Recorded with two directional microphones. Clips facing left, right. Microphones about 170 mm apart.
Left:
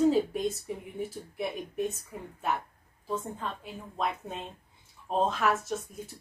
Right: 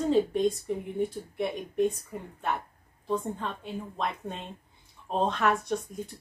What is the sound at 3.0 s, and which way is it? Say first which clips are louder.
Speech: right 4 dB; 5° left (ahead or behind).